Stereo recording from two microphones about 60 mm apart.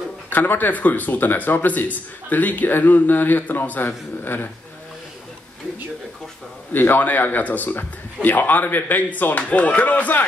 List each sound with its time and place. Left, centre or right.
0.3 s speech: left
6.7 s speech: left